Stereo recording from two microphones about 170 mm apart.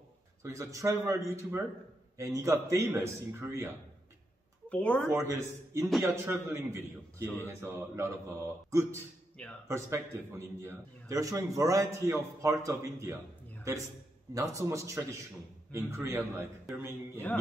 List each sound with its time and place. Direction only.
0.4 s a man's voice: 15° right (ahead or behind)
4.6 s speech: 5° left (ahead or behind)
5.1 s a man's voice: 15° right (ahead or behind)
14.3 s a man's voice: 20° right (ahead or behind)